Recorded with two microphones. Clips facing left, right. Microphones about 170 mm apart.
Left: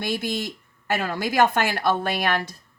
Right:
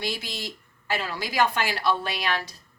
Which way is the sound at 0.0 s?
50° left (ahead or behind).